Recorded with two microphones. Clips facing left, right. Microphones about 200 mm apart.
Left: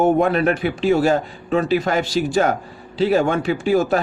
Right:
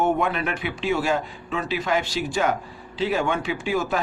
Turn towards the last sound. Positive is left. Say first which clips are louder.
# left 7 dB
turn(degrees=40)  # may be behind; listen again after turning